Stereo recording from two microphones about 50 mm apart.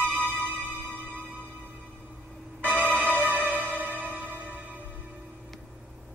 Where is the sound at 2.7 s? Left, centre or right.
Right.